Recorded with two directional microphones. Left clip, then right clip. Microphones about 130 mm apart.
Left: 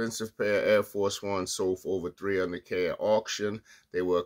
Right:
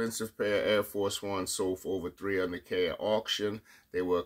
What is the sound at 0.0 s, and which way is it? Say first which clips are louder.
Speech: left 2 dB; 35° left (ahead or behind).